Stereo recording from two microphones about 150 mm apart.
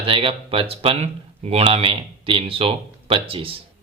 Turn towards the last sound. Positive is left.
turn(degrees=-40)  # may be behind; listen again after turning